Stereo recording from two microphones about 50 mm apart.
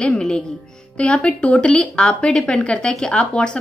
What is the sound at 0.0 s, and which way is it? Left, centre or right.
A woman's voice, centre.